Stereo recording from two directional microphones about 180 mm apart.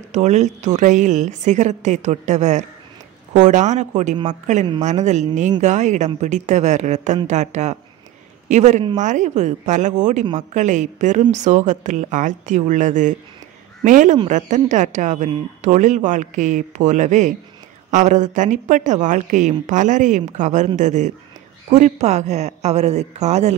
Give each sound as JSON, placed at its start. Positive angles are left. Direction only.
{"t": 0.1, "sound": "a woman's voice", "side_deg": -40}